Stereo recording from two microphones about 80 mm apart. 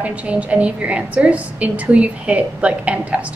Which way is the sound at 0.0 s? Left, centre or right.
Centre.